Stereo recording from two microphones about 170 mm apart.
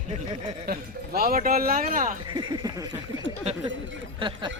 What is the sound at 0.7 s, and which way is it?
Speech, 60° right (ahead or behind).